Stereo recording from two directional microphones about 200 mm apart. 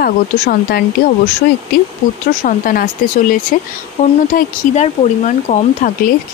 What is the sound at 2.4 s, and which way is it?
Speech, 45° left (ahead or behind).